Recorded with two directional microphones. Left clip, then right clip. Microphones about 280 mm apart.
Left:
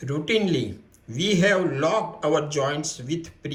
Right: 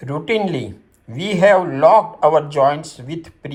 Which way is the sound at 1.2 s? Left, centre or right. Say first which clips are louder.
Right 8 dB; centre.